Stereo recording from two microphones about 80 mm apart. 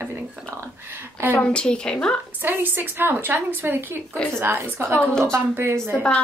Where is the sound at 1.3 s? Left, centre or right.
Centre.